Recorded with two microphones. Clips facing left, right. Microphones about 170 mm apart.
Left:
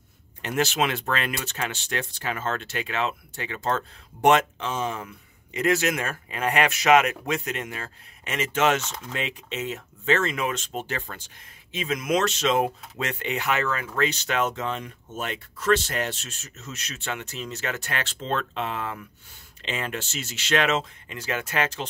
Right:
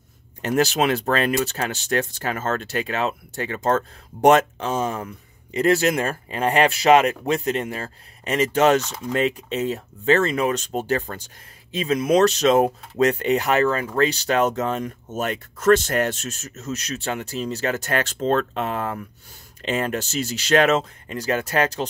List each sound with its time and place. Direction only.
0.4 s speech: 40° right (ahead or behind)
8.8 s speech: 5° right (ahead or behind)
9.1 s speech: 40° right (ahead or behind)